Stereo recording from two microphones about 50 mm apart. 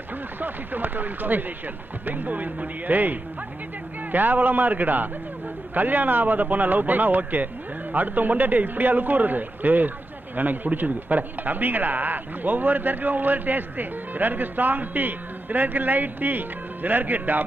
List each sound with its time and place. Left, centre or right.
0.3 s a man's voice: right